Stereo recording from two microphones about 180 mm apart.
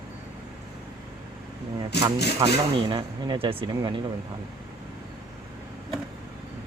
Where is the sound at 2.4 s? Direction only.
25° right (ahead or behind).